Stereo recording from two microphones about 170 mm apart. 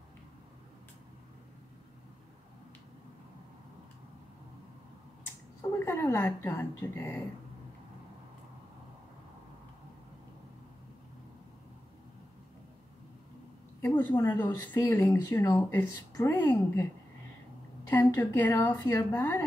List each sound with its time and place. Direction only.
5.6 s speech: 15° left (ahead or behind)
13.7 s speech: 15° left (ahead or behind)
17.8 s speech: 15° left (ahead or behind)